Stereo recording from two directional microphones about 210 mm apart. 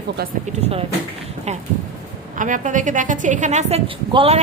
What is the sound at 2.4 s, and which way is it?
A woman's voice, 35° right (ahead or behind).